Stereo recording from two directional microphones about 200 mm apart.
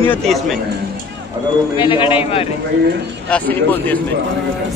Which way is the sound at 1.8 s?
25° left (ahead or behind).